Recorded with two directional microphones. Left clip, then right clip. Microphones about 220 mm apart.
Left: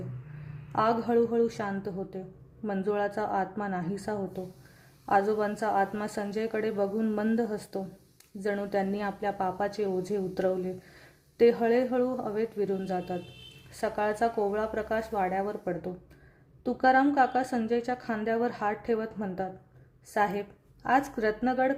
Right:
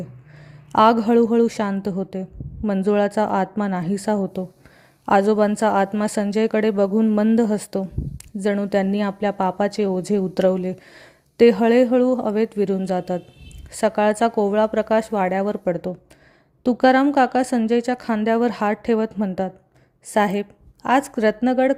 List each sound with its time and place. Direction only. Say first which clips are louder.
0.7 s a woman's voice: right 11 dB; 35° right (ahead or behind)